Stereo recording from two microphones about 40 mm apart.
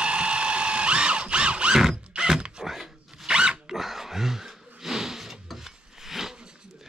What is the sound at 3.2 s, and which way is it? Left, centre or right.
Zipper, right.